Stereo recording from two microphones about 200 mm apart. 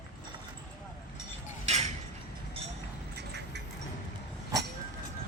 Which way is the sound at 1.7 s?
35° right (ahead or behind).